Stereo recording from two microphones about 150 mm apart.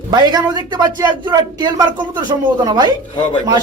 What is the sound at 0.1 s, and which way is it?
Speech, 30° right (ahead or behind).